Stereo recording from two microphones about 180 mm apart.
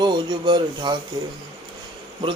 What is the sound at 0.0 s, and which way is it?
A man's voice, 25° right (ahead or behind).